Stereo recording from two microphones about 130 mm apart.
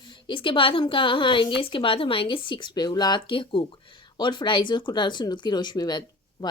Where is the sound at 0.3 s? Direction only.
40° left (ahead or behind).